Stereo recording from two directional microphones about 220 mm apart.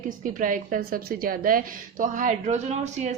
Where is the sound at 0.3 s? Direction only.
35° right (ahead or behind).